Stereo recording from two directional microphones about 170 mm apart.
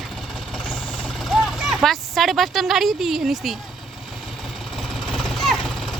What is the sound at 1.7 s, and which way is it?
A woman's voice, centre (ahead or behind).